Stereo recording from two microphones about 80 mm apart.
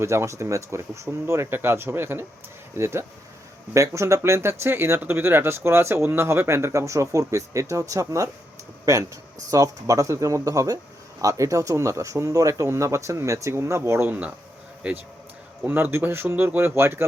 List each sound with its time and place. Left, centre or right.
0.0 s speech: right
9.5 s speech: right
14.1 s speech: centre